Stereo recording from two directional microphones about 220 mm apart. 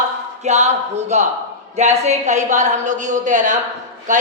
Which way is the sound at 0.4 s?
30° right (ahead or behind).